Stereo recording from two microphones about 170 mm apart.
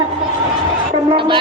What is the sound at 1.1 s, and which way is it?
Music, 30° right (ahead or behind).